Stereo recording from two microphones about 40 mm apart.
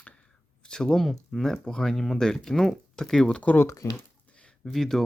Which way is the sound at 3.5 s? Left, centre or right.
Left.